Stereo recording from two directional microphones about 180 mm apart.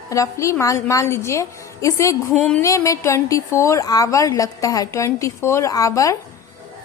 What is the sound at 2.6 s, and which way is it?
A woman's voice, 15° left (ahead or behind).